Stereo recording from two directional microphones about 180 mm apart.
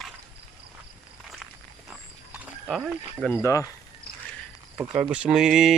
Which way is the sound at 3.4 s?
15° left (ahead or behind).